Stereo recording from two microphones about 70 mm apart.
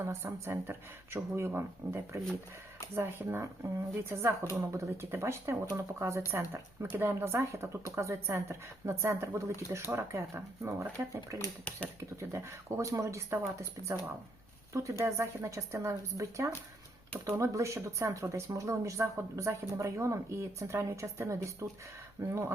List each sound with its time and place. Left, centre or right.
0.0 s speech: right